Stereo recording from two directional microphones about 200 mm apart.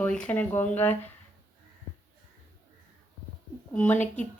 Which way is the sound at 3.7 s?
5° left (ahead or behind).